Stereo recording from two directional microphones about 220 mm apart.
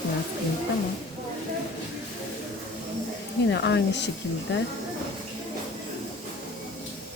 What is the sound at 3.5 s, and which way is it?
Speech, 55° left (ahead or behind).